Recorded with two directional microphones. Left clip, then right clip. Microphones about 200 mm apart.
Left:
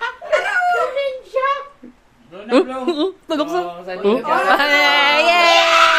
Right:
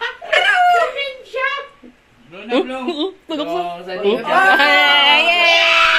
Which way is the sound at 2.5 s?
40° left (ahead or behind).